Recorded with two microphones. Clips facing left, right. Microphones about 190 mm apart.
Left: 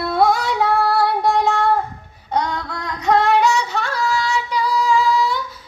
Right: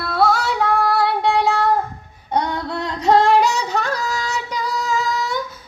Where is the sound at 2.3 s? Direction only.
20° right (ahead or behind).